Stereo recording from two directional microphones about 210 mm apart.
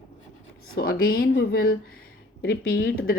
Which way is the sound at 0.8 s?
45° left (ahead or behind).